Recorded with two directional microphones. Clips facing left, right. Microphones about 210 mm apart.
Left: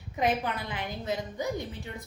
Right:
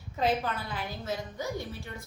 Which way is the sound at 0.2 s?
15° left (ahead or behind).